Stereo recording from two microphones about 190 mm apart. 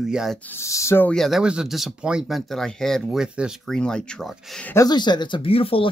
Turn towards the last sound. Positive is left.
turn(degrees=30)  # may be behind; listen again after turning